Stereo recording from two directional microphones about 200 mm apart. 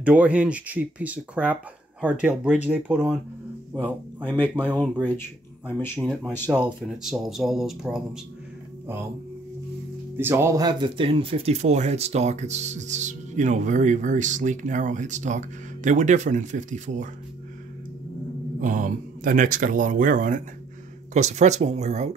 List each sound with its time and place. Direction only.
0.0 s speech: 5° right (ahead or behind)
4.3 s speech: 5° left (ahead or behind)
5.7 s speech: 10° left (ahead or behind)
5.9 s speech: centre (ahead or behind)
10.1 s speech: 10° right (ahead or behind); by 17.1 s 40° right (ahead or behind)
18.6 s speech: 40° right (ahead or behind)